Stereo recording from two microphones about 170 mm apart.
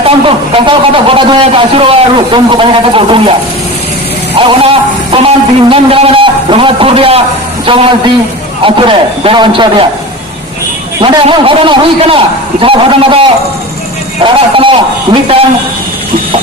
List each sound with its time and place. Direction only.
0.0 s a man's voice: 30° right (ahead or behind)
4.4 s a sound: 30° right (ahead or behind)
7.7 s a man's voice: 30° right (ahead or behind)
11.0 s a man's voice: 30° right (ahead or behind)
14.3 s a man's voice: 30° right (ahead or behind)